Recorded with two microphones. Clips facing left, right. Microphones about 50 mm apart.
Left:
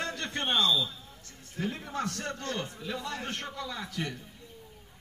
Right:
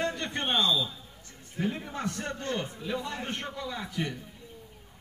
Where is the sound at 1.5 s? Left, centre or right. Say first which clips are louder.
Right 2 dB; right.